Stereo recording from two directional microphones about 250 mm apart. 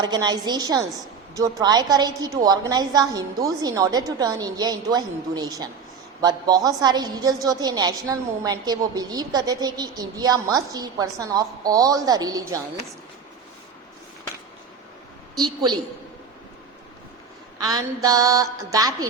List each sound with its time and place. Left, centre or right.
0.0 s a woman's voice: centre
17.6 s a woman's voice: centre